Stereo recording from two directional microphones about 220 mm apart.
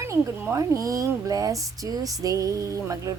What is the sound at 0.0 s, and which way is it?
Speech, 15° right (ahead or behind).